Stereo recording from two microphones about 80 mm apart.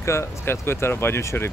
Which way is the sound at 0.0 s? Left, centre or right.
Left.